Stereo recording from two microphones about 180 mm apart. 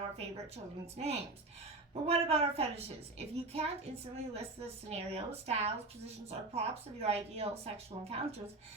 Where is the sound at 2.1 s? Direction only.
35° right (ahead or behind).